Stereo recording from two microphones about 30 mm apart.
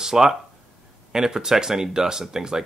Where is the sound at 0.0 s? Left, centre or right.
Centre.